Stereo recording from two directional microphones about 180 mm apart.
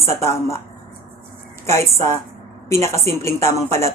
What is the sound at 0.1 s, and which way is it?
Speech, 15° left (ahead or behind).